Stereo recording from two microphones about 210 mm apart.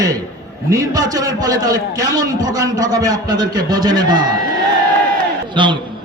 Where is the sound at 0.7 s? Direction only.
15° right (ahead or behind).